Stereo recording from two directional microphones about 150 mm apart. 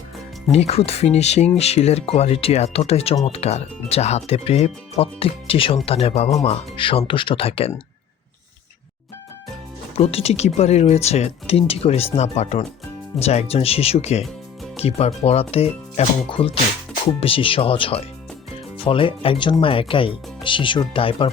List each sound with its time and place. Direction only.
0.5 s speech: 45° left (ahead or behind)
10.0 s speech: 40° left (ahead or behind)